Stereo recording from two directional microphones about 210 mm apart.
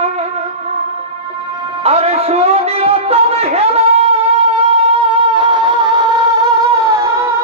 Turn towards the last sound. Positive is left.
turn(degrees=-15)  # may be behind; listen again after turning